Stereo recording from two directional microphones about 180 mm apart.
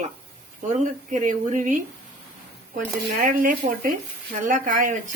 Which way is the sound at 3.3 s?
50° right (ahead or behind).